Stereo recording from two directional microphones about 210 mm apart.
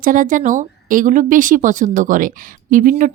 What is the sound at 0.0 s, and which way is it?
Speech, 40° right (ahead or behind).